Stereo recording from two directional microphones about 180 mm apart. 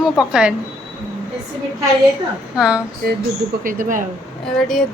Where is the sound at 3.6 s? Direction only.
50° right (ahead or behind).